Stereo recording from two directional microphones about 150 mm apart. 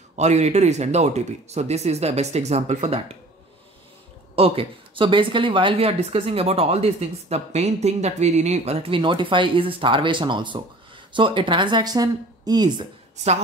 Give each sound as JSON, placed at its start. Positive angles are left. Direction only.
{"t": 0.1, "sound": "speech", "side_deg": -50}
{"t": 4.4, "sound": "a woman's voice", "side_deg": -35}